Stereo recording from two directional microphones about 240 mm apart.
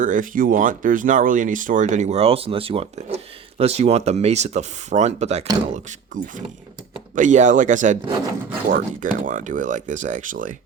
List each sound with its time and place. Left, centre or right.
0.0 s speech: right